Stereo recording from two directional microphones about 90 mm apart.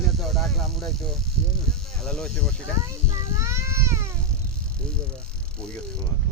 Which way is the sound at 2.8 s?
35° right (ahead or behind).